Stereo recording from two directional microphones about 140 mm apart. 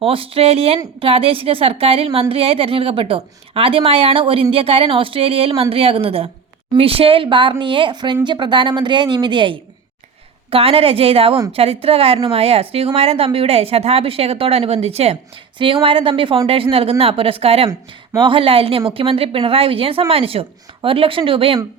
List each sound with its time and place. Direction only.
0.0 s a woman's voice: 40° right (ahead or behind)
17.7 s speech: 30° right (ahead or behind)